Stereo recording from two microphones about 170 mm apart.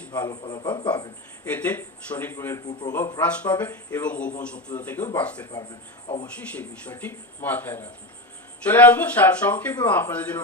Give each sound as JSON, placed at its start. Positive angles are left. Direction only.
{"t": 0.0, "sound": "speech", "side_deg": 10}
{"t": 0.4, "sound": "a man's voice", "side_deg": 25}
{"t": 1.5, "sound": "a man's voice", "side_deg": 10}